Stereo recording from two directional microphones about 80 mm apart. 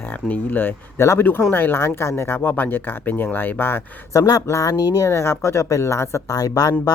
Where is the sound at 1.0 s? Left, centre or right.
Left.